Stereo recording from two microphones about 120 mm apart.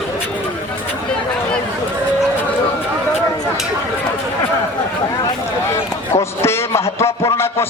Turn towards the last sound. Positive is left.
turn(degrees=20)  # may be behind; listen again after turning